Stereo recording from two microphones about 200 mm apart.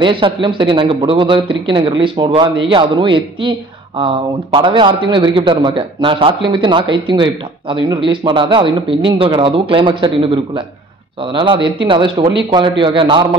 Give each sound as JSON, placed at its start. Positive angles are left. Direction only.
{"t": 0.0, "sound": "a man's voice", "side_deg": -25}
{"t": 4.6, "sound": "a man's voice", "side_deg": -25}